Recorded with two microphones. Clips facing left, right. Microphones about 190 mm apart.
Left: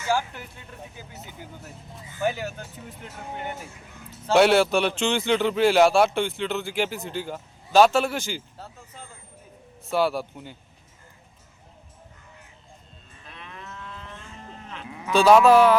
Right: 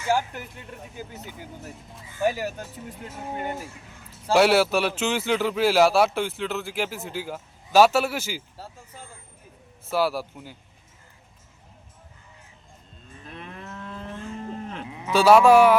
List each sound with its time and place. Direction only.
2.2 s speech: 40° right (ahead or behind)
4.3 s speech: 5° right (ahead or behind)
9.9 s speech: 5° right (ahead or behind)
13.2 s cattle: 45° right (ahead or behind)
15.1 s speech: 10° right (ahead or behind)